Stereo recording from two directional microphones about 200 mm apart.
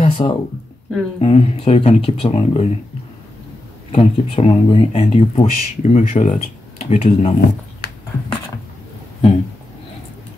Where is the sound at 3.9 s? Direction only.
30° left (ahead or behind).